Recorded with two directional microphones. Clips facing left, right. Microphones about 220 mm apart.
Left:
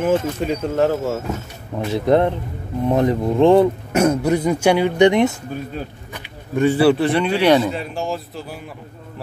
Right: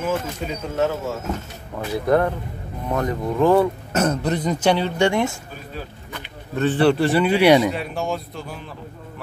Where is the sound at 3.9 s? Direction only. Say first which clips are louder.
Left 5 dB; 10° left (ahead or behind).